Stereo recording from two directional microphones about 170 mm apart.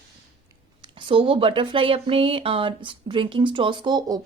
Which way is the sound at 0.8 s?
30° right (ahead or behind).